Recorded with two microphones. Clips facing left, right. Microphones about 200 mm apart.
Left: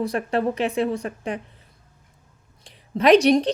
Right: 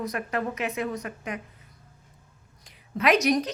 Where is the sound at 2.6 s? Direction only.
30° left (ahead or behind).